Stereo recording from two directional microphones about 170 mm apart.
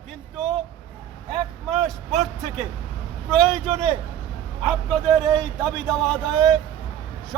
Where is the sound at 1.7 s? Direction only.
5° left (ahead or behind).